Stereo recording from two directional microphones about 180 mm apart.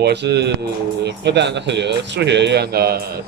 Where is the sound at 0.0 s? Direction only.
70° right (ahead or behind).